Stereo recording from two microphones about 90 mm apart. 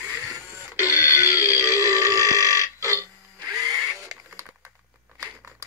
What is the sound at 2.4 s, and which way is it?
Burping, 40° right (ahead or behind).